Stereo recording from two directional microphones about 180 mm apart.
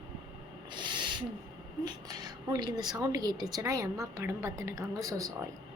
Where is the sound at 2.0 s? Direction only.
20° right (ahead or behind).